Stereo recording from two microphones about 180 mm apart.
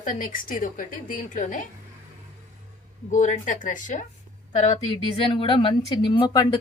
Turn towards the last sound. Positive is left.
turn(degrees=25)  # may be behind; listen again after turning